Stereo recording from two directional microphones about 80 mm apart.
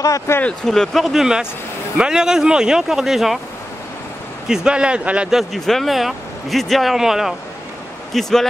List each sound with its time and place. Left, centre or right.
0.0 s speech: left
0.7 s speech: centre
4.5 s speech: centre
5.4 s speech: centre